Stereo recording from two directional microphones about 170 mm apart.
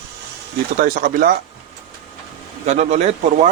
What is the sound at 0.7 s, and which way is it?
Speech, 55° right (ahead or behind).